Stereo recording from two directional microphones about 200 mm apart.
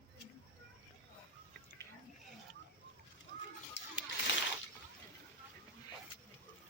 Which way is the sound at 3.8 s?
65° left (ahead or behind).